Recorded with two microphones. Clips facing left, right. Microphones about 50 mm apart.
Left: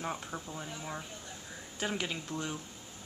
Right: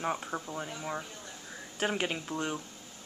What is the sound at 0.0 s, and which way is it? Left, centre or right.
Speech, centre.